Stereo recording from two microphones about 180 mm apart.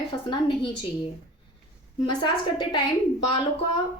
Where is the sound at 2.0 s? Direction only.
25° left (ahead or behind).